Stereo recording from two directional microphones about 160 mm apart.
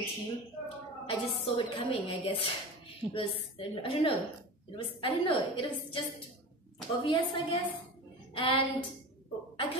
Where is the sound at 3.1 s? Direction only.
35° left (ahead or behind).